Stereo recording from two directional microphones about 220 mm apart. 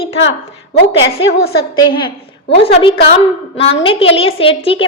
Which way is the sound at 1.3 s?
45° left (ahead or behind).